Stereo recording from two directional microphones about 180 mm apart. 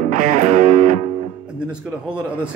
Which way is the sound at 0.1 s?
45° right (ahead or behind).